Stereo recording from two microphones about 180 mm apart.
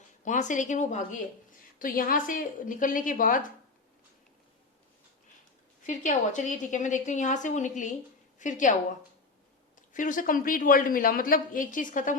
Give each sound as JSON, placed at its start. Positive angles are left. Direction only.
{"t": 0.3, "sound": "a man's voice", "side_deg": 45}
{"t": 5.8, "sound": "a man's voice", "side_deg": 45}